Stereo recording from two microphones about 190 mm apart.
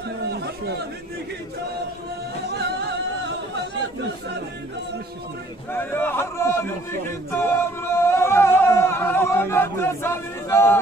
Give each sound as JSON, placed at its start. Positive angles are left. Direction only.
{"t": 0.3, "sound": "chatter", "side_deg": -60}
{"t": 2.6, "sound": "music", "side_deg": -65}
{"t": 5.7, "sound": "a man's voice", "side_deg": 10}
{"t": 7.4, "sound": "singing", "side_deg": 15}